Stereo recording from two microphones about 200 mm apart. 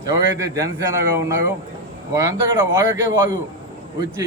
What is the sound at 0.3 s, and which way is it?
A man's voice, 15° right (ahead or behind).